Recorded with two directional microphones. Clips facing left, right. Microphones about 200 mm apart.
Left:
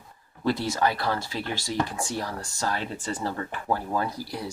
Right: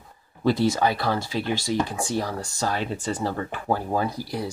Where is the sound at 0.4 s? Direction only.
20° right (ahead or behind).